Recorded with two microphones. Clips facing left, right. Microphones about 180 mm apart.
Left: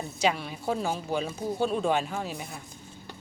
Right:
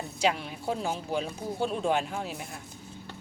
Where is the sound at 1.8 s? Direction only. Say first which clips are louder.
Left 1 dB; 5° right (ahead or behind).